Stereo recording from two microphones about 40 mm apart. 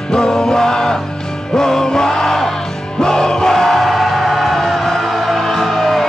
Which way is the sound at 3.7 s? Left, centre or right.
Centre.